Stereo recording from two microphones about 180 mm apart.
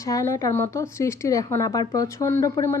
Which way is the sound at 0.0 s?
15° left (ahead or behind).